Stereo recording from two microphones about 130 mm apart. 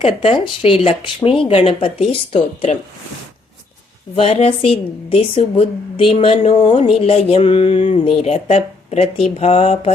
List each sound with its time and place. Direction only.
0.0 s speech: 45° left (ahead or behind)
4.1 s speech: 50° left (ahead or behind)